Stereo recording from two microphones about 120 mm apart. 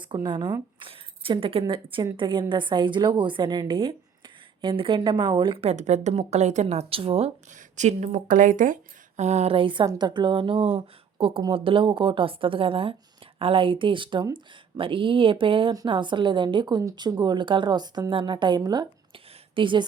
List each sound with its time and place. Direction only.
0.0 s a woman's voice: 40° right (ahead or behind)
7.8 s a woman's voice: 75° right (ahead or behind); by 19.8 s 45° right (ahead or behind)